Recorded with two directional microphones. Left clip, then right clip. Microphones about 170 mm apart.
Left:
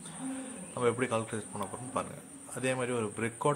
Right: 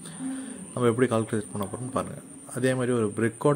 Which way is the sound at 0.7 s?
25° right (ahead or behind).